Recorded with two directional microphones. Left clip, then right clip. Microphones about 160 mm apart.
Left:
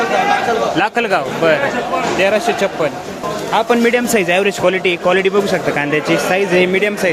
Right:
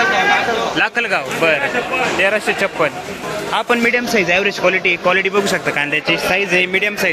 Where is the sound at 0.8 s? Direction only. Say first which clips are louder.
Left 2 dB; 15° left (ahead or behind).